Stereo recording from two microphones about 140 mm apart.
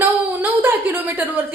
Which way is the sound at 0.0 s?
15° right (ahead or behind).